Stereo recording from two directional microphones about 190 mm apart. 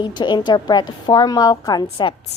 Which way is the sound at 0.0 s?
25° left (ahead or behind).